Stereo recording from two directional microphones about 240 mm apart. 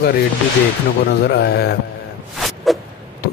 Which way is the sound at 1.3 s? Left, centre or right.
Left.